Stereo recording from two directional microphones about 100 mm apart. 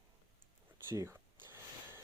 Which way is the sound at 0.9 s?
25° right (ahead or behind).